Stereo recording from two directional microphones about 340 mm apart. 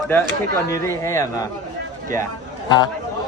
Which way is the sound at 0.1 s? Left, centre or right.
Centre.